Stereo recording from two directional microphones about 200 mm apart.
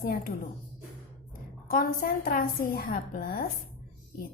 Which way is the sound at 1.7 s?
45° left (ahead or behind).